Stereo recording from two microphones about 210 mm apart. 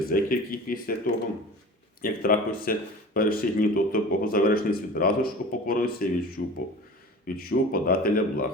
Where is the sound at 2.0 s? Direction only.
45° left (ahead or behind).